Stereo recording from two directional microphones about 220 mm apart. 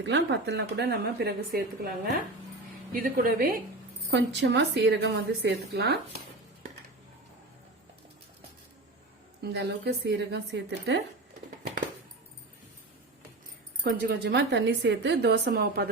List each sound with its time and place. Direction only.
0.0 s speech: 55° right (ahead or behind)
2.9 s a woman's voice: 40° right (ahead or behind)
4.1 s speech: 55° right (ahead or behind)
9.4 s speech: 50° right (ahead or behind)
13.8 s speech: 45° right (ahead or behind)